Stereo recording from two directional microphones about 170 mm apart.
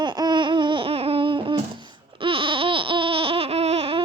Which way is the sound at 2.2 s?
30° right (ahead or behind).